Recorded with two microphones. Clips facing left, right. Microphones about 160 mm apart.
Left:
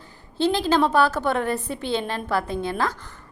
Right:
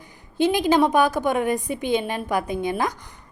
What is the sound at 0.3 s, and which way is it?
A woman's voice, 15° right (ahead or behind).